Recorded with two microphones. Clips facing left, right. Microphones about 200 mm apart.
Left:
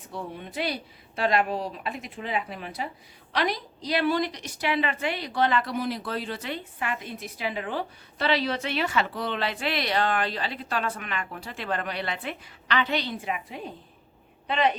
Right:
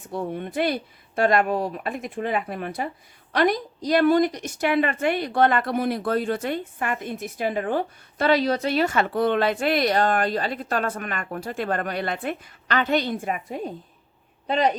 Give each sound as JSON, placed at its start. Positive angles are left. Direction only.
{"t": 0.1, "sound": "a woman's voice", "side_deg": -55}